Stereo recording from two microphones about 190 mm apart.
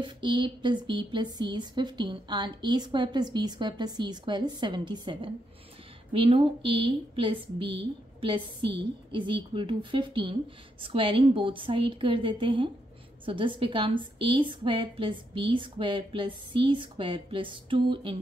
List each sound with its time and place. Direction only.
0.0 s speech: 25° right (ahead or behind)